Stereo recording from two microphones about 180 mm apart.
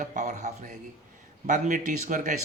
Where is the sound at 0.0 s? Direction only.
40° right (ahead or behind).